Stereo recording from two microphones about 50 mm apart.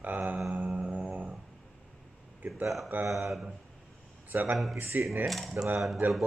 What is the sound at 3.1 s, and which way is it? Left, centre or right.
Speech, centre.